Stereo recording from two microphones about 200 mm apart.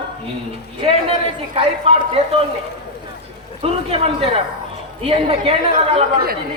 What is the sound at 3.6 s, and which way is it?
A man's voice, 30° right (ahead or behind).